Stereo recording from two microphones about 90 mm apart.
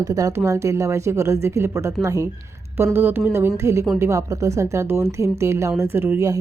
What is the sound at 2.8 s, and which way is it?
A woman's voice, 25° right (ahead or behind).